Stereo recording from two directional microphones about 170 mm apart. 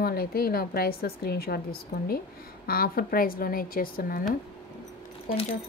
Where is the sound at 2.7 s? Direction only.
60° left (ahead or behind).